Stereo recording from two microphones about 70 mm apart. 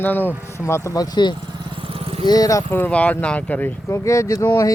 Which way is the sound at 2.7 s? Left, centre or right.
Left.